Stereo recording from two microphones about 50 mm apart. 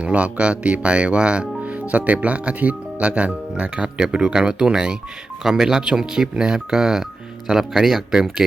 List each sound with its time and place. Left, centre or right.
0.0 s speech: right; by 8.4 s centre